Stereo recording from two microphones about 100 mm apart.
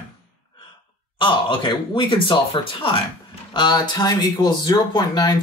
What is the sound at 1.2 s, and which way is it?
Speech, 55° left (ahead or behind).